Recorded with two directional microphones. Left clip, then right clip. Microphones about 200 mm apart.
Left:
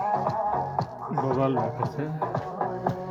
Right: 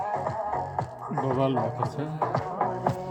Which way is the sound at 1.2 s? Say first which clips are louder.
Left 1 dB; 20° right (ahead or behind).